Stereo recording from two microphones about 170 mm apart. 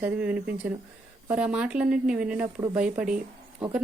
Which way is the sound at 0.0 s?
5° right (ahead or behind).